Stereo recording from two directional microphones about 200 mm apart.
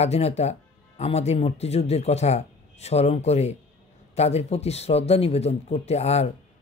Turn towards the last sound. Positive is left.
turn(degrees=30)  # may be behind; listen again after turning